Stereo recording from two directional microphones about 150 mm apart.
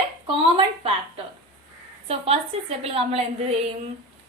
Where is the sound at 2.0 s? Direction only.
40° right (ahead or behind).